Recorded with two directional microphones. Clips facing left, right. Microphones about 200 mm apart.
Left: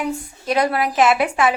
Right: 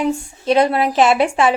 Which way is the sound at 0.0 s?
25° right (ahead or behind).